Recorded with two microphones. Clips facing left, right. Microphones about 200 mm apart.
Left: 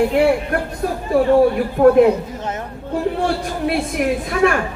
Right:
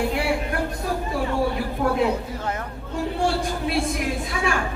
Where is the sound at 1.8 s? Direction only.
60° left (ahead or behind).